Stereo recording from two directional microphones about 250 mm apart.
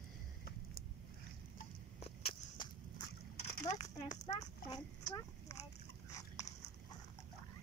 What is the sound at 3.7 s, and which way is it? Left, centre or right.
Speech, centre.